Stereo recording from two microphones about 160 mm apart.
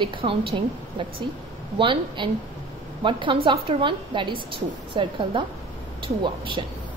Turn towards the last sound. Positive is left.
turn(degrees=-30)  # may be behind; listen again after turning